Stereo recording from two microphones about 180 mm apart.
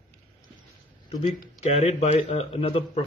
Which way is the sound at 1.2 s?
35° left (ahead or behind).